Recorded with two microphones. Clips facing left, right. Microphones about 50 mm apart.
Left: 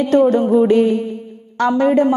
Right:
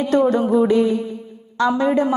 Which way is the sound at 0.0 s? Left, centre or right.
Left.